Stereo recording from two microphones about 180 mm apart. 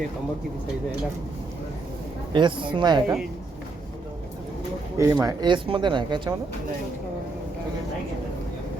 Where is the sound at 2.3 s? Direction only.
25° right (ahead or behind).